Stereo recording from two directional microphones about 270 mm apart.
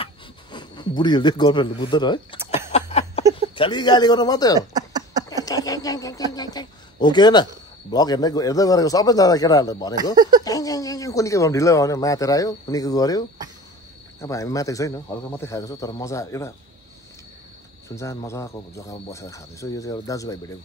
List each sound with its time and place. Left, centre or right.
0.0 s a sound: centre
3.5 s speech: centre
4.6 s a sound: centre
5.4 s a woman's voice: centre
10.1 s speech: centre
10.4 s speech: centre
14.2 s speech: centre
17.8 s speech: centre